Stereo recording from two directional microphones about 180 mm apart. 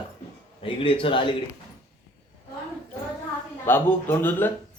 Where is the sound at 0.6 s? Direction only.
30° left (ahead or behind).